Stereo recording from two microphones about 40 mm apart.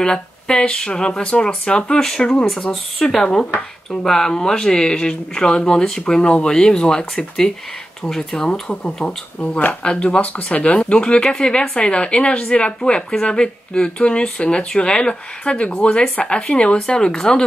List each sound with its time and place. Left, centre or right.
0.0 s speech: left
2.7 s speech: centre
8.8 s speech: left